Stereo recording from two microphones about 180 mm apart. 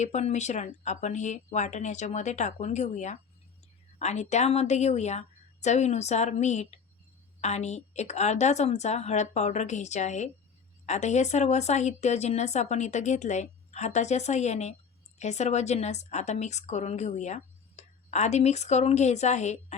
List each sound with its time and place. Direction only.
0.0 s a woman's voice: 40° left (ahead or behind)